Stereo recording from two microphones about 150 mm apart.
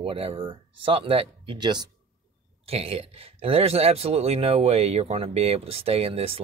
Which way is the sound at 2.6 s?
40° right (ahead or behind).